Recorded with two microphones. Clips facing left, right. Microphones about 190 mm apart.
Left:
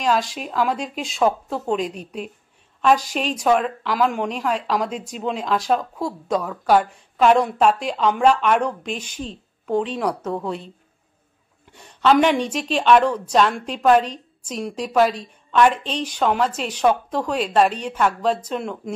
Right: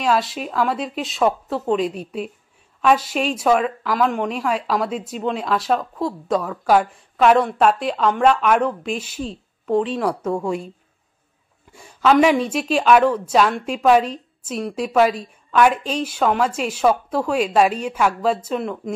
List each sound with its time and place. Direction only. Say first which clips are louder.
0.0 s a woman's voice: right 1 dB; centre (ahead or behind)
11.7 s a woman's voice: right 1 dB; 5° right (ahead or behind)